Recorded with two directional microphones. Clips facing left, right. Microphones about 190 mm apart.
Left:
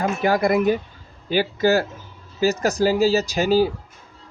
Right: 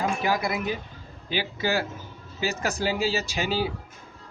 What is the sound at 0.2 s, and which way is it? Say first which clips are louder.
Speech: left 8 dB; 50° left (ahead or behind).